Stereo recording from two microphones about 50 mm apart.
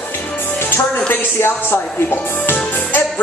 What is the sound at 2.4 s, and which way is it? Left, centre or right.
Music, left.